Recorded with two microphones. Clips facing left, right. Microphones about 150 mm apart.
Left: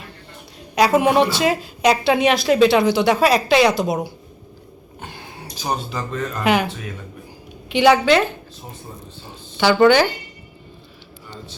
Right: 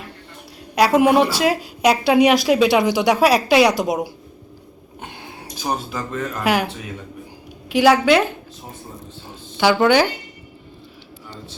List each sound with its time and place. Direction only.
0.9 s a woman's voice: 5° right (ahead or behind)
5.6 s speech: 5° right (ahead or behind)
7.7 s speech: 5° right (ahead or behind)
9.6 s a woman's voice: 5° right (ahead or behind)